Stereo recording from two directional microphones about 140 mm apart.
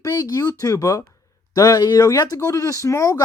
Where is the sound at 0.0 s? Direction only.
25° left (ahead or behind).